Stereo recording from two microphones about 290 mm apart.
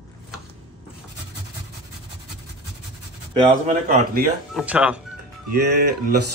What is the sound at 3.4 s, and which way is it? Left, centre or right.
Speech, right.